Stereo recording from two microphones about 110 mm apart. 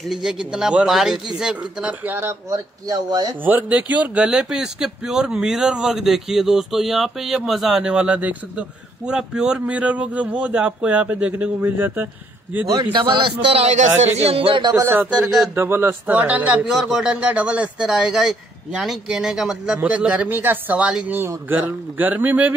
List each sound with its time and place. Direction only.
0.1 s a man's voice: 5° right (ahead or behind); by 2.6 s 20° right (ahead or behind)
2.9 s speech: 35° right (ahead or behind)
3.4 s speech: 15° right (ahead or behind)
12.6 s a man's voice: 40° right (ahead or behind)
14.8 s speech: 20° right (ahead or behind)
15.0 s a man's voice: 5° right (ahead or behind)
15.5 s speech: 20° right (ahead or behind)